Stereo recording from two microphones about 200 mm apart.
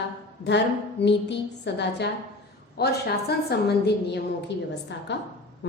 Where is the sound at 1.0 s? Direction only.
60° left (ahead or behind).